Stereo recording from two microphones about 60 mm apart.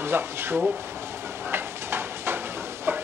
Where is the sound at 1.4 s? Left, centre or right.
Right.